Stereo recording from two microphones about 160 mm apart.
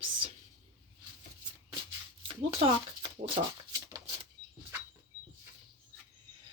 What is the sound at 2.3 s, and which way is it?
Speech, 35° right (ahead or behind).